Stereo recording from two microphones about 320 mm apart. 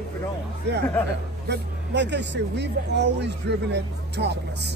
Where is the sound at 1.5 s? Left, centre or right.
Right.